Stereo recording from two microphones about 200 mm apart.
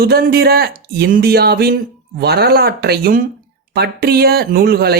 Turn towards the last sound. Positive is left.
turn(degrees=-50)  # may be behind; listen again after turning